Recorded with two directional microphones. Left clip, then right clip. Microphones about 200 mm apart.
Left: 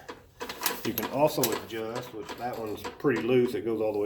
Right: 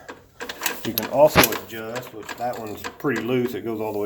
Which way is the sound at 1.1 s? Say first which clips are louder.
Right 11 dB; 35° right (ahead or behind).